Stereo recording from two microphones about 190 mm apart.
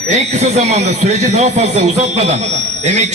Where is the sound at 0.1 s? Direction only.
35° right (ahead or behind).